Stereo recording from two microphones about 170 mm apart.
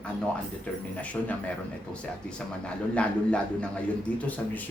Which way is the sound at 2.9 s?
5° left (ahead or behind).